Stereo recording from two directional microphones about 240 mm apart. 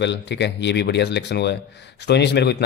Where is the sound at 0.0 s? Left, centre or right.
Left.